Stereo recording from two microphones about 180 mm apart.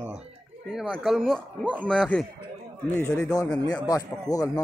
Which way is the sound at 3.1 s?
15° left (ahead or behind).